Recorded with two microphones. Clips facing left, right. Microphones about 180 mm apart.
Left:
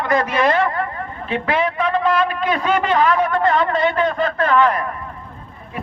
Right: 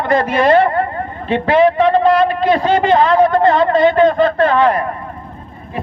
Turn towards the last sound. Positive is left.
turn(degrees=-30)  # may be behind; listen again after turning